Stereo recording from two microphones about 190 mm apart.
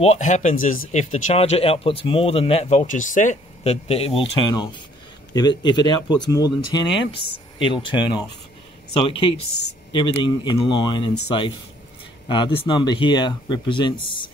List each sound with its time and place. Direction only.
0.0 s speech: 35° left (ahead or behind)
9.0 s speech: 25° left (ahead or behind)